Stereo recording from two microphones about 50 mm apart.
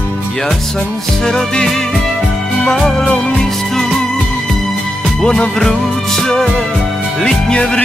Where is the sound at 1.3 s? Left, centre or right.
Centre.